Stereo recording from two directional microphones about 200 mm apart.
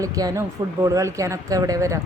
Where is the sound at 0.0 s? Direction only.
15° right (ahead or behind).